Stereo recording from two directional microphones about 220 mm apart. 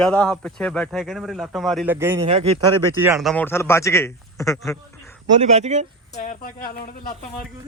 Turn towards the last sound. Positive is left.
turn(degrees=40)  # may be behind; listen again after turning